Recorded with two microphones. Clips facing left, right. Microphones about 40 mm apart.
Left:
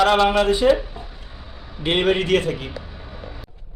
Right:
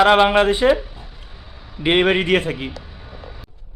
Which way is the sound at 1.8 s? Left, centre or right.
Right.